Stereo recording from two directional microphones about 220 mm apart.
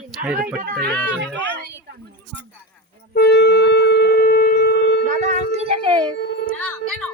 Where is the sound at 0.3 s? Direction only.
40° right (ahead or behind).